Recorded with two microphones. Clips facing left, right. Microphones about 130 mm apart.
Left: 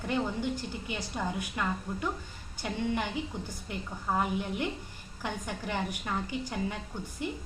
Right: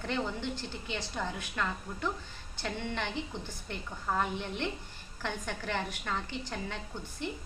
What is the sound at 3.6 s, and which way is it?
A woman's voice, 10° left (ahead or behind).